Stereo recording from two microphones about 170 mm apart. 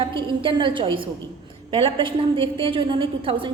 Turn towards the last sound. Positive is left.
turn(degrees=-30)  # may be behind; listen again after turning